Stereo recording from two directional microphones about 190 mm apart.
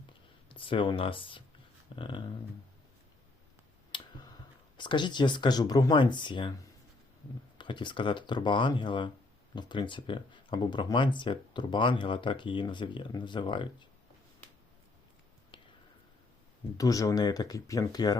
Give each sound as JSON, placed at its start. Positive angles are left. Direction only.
{"t": 0.4, "sound": "speech", "side_deg": 25}
{"t": 3.9, "sound": "clicking", "side_deg": 25}
{"t": 4.8, "sound": "speech", "side_deg": 25}
{"t": 7.6, "sound": "speech", "side_deg": 25}
{"t": 15.5, "sound": "a sound", "side_deg": 25}
{"t": 16.7, "sound": "speech", "side_deg": 20}